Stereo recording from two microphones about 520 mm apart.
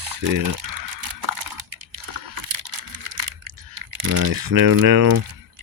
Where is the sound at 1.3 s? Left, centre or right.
Right.